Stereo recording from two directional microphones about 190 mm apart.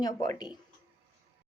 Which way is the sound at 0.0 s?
20° left (ahead or behind).